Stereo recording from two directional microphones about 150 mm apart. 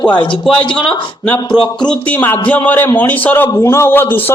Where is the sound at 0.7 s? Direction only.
5° left (ahead or behind).